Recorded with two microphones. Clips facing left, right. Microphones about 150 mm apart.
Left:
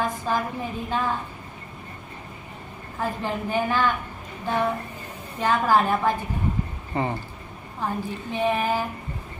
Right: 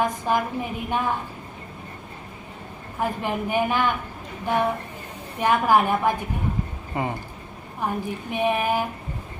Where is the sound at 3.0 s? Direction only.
15° right (ahead or behind).